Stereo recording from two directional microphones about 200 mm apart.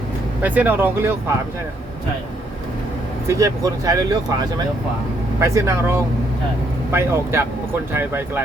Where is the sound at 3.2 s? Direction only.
15° right (ahead or behind).